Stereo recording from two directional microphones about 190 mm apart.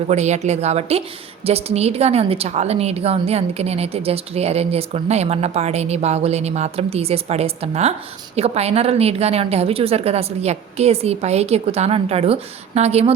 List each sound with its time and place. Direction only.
0.1 s a woman's voice: 35° right (ahead or behind)